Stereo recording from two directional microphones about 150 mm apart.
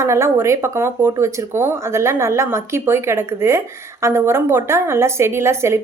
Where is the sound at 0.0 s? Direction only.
20° right (ahead or behind).